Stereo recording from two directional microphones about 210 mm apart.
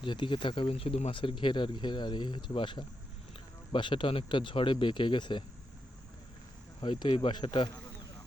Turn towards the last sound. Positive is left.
turn(degrees=20)  # may be behind; listen again after turning